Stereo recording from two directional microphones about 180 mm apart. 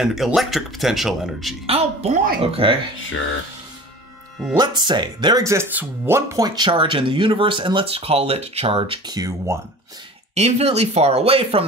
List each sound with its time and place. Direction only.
0.0 s speech: centre (ahead or behind)
1.7 s speech: 35° right (ahead or behind)
4.6 s speech: 25° right (ahead or behind)
10.3 s speech: 35° right (ahead or behind)